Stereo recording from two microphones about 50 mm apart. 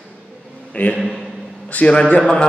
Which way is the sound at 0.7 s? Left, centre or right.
Left.